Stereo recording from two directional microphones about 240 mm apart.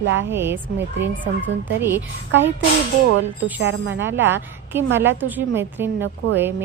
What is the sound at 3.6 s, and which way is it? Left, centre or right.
Speech, right.